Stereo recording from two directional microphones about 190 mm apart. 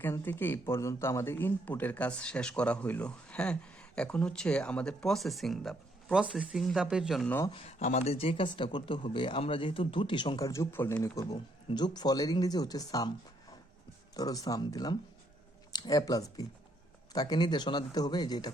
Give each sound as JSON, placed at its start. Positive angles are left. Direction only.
{"t": 0.0, "sound": "speech", "side_deg": 10}
{"t": 7.5, "sound": "speech", "side_deg": 35}
{"t": 14.2, "sound": "speech", "side_deg": 20}